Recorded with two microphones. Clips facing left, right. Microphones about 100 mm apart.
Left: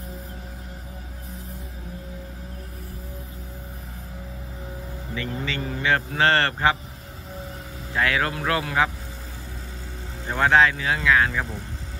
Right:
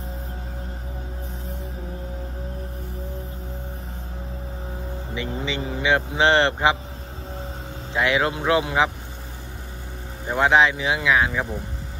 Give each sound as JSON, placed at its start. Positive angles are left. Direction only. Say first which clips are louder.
{"t": 5.1, "sound": "speech", "louder": "right 1 dB", "side_deg": -15}
{"t": 7.9, "sound": "a man's voice", "louder": "right 2 dB", "side_deg": -20}
{"t": 10.2, "sound": "speech", "louder": "right 1 dB", "side_deg": -15}